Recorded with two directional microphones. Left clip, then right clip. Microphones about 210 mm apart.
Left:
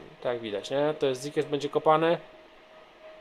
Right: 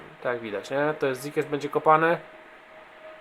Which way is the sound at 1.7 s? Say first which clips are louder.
Right 3 dB; 25° right (ahead or behind).